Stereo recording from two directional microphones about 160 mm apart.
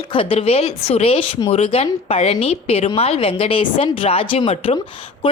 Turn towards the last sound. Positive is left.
turn(degrees=35)  # may be behind; listen again after turning